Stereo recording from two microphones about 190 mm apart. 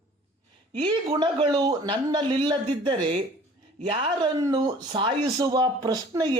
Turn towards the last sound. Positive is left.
turn(degrees=-20)  # may be behind; listen again after turning